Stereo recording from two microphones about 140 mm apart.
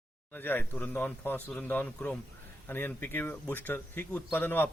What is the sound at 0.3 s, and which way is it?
Speech, 15° left (ahead or behind).